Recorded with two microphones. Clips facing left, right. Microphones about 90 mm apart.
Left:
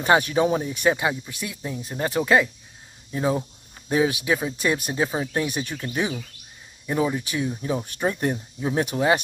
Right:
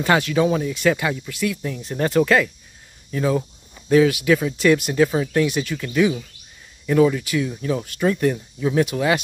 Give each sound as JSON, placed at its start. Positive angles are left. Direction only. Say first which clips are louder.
{"t": 0.0, "sound": "speech", "louder": "right 1 dB", "side_deg": 25}